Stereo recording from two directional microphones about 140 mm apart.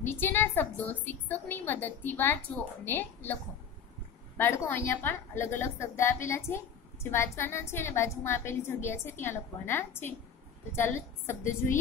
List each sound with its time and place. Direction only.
0.0 s a woman's voice: 15° left (ahead or behind)
4.4 s a woman's voice: 15° left (ahead or behind)